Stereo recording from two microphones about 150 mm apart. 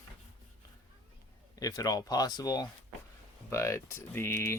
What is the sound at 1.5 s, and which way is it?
Speech, 25° left (ahead or behind).